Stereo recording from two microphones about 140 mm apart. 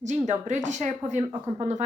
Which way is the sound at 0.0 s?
60° right (ahead or behind).